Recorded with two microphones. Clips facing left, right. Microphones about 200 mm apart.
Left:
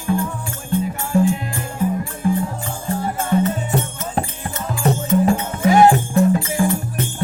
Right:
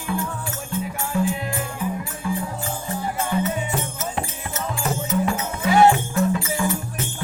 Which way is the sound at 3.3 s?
40° left (ahead or behind).